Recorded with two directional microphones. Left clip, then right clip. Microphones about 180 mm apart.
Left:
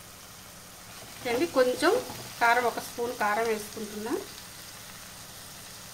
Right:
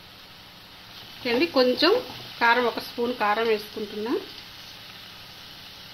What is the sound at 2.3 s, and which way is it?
Frying, 30° right (ahead or behind).